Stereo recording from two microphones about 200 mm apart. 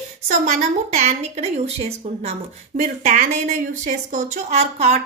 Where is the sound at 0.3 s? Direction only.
35° right (ahead or behind).